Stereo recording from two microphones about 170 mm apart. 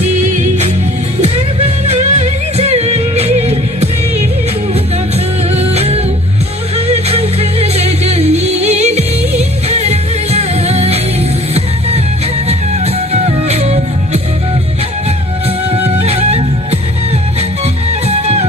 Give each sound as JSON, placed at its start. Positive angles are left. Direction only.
{"t": 0.0, "sound": "music", "side_deg": -45}
{"t": 1.9, "sound": "music", "side_deg": -40}
{"t": 5.5, "sound": "music", "side_deg": -35}
{"t": 12.5, "sound": "music", "side_deg": -40}
{"t": 15.7, "sound": "music", "side_deg": -40}
{"t": 18.1, "sound": "music", "side_deg": -40}